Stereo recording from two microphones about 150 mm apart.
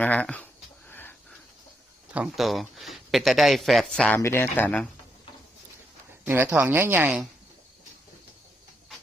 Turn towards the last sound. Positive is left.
turn(degrees=-10)  # may be behind; listen again after turning